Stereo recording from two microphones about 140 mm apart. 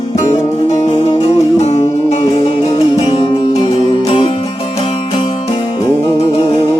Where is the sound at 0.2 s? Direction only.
50° left (ahead or behind); by 5.9 s 35° left (ahead or behind).